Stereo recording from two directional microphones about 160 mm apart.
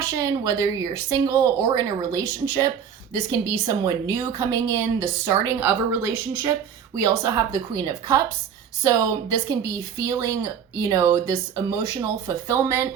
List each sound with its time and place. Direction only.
0.0 s speech: 20° right (ahead or behind)